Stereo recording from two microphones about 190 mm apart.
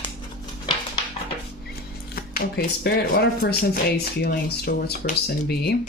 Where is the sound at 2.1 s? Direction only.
50° left (ahead or behind).